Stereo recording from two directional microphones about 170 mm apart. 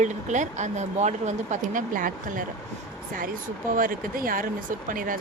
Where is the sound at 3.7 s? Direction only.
55° right (ahead or behind).